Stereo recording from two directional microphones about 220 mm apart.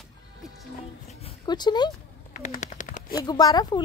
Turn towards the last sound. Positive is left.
turn(degrees=15)  # may be behind; listen again after turning